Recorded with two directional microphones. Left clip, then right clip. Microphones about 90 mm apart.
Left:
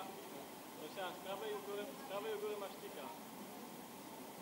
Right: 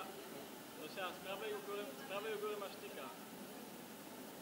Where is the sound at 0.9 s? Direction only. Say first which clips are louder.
Even; 35° right (ahead or behind).